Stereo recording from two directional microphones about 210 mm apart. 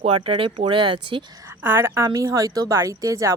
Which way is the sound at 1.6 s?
10° right (ahead or behind).